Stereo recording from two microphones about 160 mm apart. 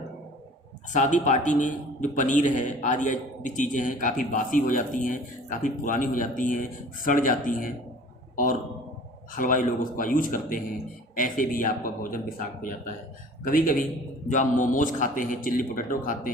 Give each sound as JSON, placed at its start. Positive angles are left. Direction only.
{"t": 0.9, "sound": "a man's voice", "side_deg": 50}
{"t": 9.3, "sound": "a man's voice", "side_deg": 55}